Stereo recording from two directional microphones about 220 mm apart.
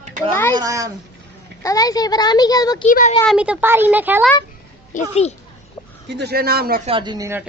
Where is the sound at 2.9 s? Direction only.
35° left (ahead or behind).